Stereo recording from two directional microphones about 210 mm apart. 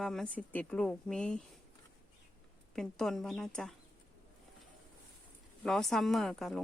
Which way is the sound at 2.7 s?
Centre (ahead or behind).